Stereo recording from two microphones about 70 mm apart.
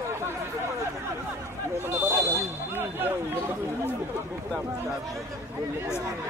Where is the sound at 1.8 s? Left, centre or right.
Right.